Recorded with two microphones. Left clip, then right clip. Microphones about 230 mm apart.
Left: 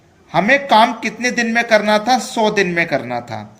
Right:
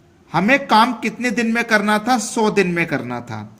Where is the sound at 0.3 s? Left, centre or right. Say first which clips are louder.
Left 3 dB; right.